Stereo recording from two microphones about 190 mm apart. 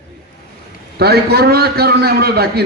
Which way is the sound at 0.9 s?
55° right (ahead or behind).